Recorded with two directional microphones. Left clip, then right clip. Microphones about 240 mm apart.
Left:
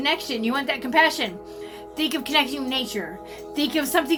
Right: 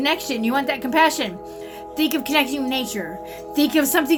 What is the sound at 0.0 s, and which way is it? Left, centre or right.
A woman's voice, centre.